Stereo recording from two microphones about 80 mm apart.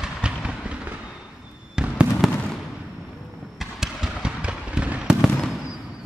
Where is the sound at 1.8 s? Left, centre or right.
Centre.